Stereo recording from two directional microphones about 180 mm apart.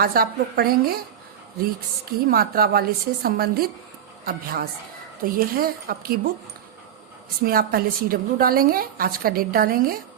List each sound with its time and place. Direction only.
0.0 s a woman's voice: 55° right (ahead or behind)
7.4 s a woman's voice: 55° right (ahead or behind)